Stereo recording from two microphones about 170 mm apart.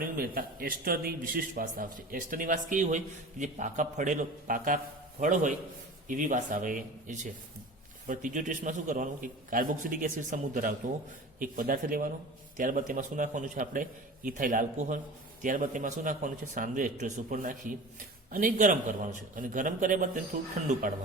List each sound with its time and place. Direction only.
0.0 s a man's voice: 60° right (ahead or behind)